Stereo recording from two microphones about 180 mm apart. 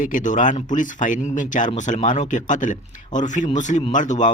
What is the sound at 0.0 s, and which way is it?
Speech, 45° left (ahead or behind).